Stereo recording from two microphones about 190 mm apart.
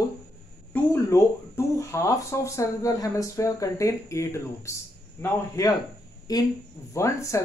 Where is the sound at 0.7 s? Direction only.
15° left (ahead or behind).